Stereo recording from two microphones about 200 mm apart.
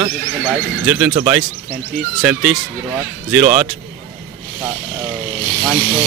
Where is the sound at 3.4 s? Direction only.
35° right (ahead or behind).